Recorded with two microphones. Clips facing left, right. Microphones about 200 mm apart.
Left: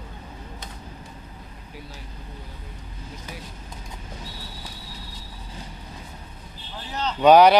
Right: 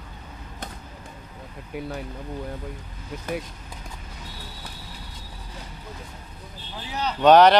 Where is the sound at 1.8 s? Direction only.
60° right (ahead or behind).